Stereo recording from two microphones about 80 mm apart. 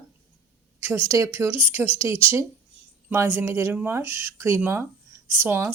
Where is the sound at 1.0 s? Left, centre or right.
Right.